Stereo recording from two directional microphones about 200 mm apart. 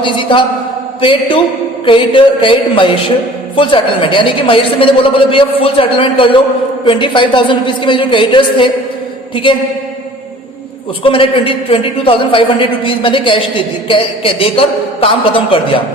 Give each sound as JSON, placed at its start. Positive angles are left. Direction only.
{"t": 0.0, "sound": "a man's voice", "side_deg": 25}
{"t": 11.0, "sound": "a man's voice", "side_deg": 25}